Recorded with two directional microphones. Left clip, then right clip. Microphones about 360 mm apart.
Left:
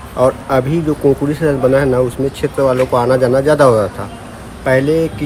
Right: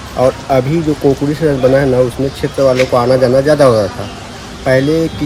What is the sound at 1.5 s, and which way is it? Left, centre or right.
Speech, centre.